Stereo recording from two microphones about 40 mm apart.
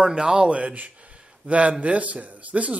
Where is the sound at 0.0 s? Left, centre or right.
Right.